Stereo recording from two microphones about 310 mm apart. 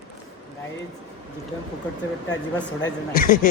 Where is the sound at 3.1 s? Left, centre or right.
Left.